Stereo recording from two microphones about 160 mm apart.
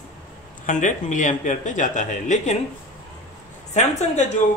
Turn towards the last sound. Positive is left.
turn(degrees=45)  # may be behind; listen again after turning